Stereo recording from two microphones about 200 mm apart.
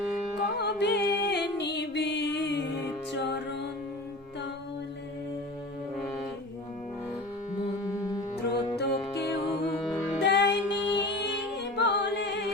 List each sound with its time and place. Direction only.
0.6 s music: 60° left (ahead or behind)
8.4 s music: 55° left (ahead or behind)
10.2 s music: 60° left (ahead or behind)